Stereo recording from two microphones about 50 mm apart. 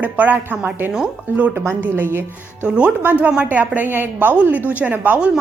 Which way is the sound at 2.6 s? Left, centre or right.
Right.